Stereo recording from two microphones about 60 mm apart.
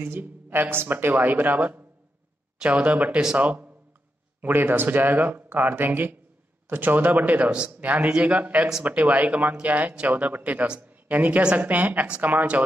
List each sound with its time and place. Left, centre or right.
0.0 s speech: right